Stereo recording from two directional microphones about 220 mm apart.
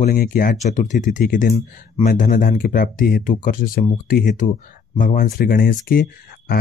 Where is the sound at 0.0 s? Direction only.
40° left (ahead or behind).